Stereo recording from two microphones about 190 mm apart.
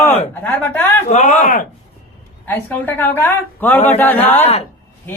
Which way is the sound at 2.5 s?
10° left (ahead or behind).